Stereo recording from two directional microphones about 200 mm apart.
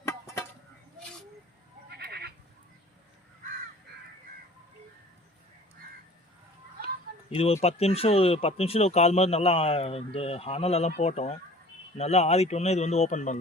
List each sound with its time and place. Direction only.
0.0 s a sound: 15° left (ahead or behind)
1.9 s goat: 55° right (ahead or behind)
7.3 s speech: 30° left (ahead or behind)